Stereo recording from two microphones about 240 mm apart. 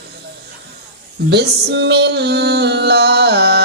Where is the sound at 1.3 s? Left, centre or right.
Right.